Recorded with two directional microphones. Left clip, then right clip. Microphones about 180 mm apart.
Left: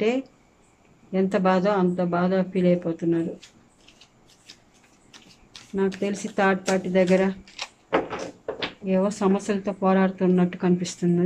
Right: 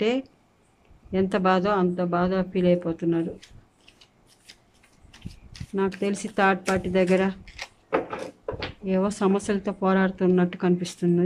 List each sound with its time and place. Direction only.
0.0 s speech: 25° right (ahead or behind)
4.5 s a sound: 15° right (ahead or behind)
5.5 s speech: 20° right (ahead or behind)
8.8 s speech: 25° right (ahead or behind)